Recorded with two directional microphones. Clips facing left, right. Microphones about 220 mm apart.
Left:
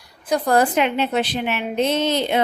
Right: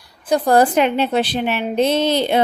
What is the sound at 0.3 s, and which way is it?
A woman's voice, 35° right (ahead or behind).